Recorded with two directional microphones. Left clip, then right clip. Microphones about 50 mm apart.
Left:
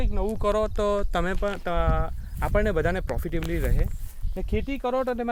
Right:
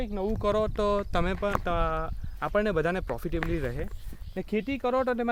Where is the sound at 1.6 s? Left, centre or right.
Left.